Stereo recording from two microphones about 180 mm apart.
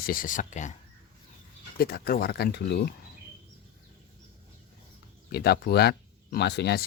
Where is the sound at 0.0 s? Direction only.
50° left (ahead or behind).